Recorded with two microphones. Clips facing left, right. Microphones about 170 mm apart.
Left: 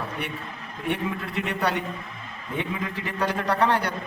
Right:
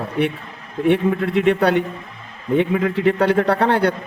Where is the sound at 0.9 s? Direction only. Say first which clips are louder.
Right 11 dB; 60° right (ahead or behind).